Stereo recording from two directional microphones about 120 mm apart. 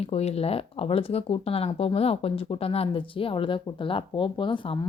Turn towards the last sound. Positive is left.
turn(degrees=45)  # may be behind; listen again after turning